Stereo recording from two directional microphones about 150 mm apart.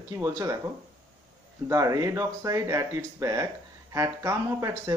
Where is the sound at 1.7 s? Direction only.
20° right (ahead or behind).